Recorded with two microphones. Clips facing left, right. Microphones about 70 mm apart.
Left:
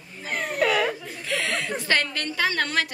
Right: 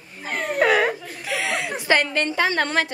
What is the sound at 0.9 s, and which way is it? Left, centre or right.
Chuckle, centre.